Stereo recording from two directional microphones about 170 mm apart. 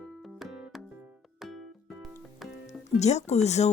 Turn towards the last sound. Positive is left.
turn(degrees=40)  # may be behind; listen again after turning